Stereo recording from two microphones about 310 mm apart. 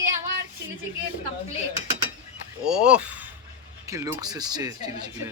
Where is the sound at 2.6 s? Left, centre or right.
Centre.